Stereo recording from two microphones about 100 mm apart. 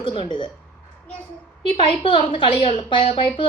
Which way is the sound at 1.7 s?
60° left (ahead or behind).